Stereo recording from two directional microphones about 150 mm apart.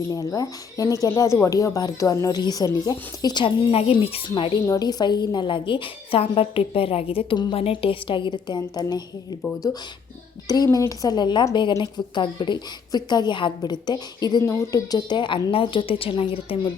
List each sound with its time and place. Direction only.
0.1 s a woman's voice: 25° left (ahead or behind)
10.4 s a woman's voice: 25° left (ahead or behind)